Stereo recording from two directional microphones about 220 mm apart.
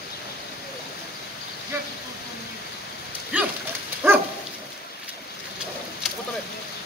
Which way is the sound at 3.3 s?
5° right (ahead or behind).